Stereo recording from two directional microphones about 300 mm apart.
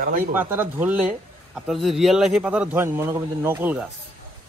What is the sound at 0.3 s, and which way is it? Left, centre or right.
A man's voice, centre.